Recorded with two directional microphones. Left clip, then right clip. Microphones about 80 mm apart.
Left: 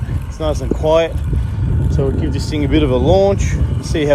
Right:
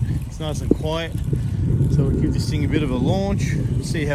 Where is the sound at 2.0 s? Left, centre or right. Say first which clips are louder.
Left 6 dB; left.